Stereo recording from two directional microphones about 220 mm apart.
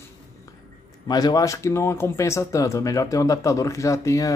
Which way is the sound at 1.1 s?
15° left (ahead or behind).